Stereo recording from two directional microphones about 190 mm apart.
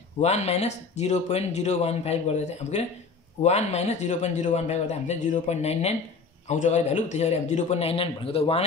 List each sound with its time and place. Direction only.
0.2 s speech: 35° left (ahead or behind)